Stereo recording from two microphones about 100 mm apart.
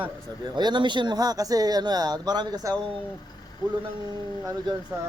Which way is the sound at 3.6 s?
5° right (ahead or behind).